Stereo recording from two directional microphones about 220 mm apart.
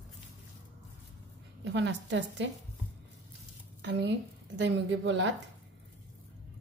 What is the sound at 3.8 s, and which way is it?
A woman's voice, 50° right (ahead or behind).